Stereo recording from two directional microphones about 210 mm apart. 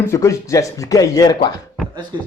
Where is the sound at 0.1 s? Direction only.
15° left (ahead or behind).